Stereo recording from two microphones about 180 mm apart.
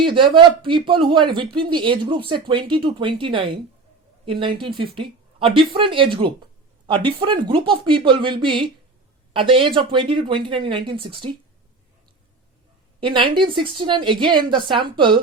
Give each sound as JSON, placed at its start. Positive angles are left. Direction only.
{"t": 0.0, "sound": "speech", "side_deg": -25}
{"t": 13.0, "sound": "speech", "side_deg": -30}